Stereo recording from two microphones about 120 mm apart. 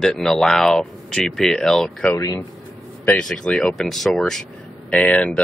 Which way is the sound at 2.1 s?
30° left (ahead or behind).